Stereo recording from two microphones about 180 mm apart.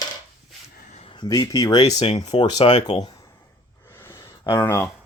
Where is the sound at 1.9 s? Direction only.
35° left (ahead or behind).